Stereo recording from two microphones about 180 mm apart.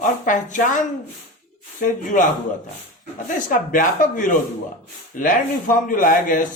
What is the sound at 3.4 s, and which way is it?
Speech, 45° left (ahead or behind).